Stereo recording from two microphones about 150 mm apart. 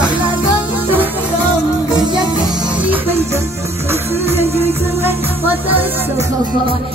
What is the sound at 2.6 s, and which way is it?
Music, 10° right (ahead or behind).